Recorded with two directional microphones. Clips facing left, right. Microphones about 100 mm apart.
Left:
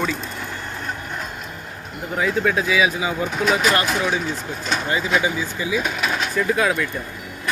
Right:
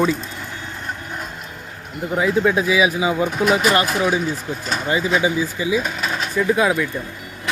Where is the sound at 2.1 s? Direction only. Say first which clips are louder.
Right 3 dB; 10° right (ahead or behind).